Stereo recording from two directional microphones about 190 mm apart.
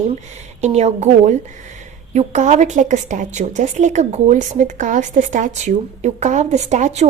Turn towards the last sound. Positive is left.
turn(degrees=-35)  # may be behind; listen again after turning